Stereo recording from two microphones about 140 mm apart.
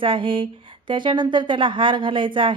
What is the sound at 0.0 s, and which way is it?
Speech, 40° right (ahead or behind).